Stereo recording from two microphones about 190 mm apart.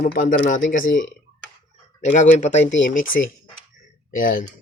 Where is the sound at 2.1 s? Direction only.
40° left (ahead or behind).